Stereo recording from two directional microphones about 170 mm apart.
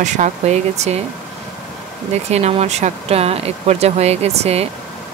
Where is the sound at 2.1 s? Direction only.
40° right (ahead or behind).